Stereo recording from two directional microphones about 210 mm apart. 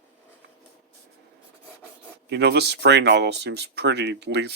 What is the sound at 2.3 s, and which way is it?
Speech, 50° right (ahead or behind).